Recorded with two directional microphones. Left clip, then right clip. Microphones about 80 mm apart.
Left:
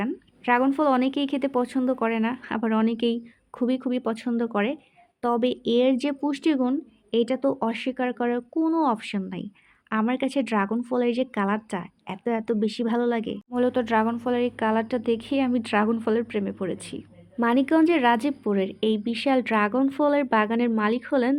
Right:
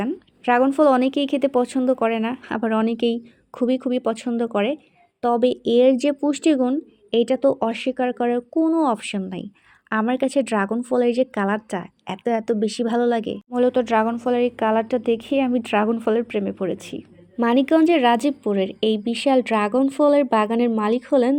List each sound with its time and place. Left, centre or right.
0.0 s a woman's voice: right
17.4 s a woman's voice: right